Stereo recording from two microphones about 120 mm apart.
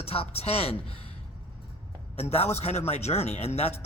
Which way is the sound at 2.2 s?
60° left (ahead or behind).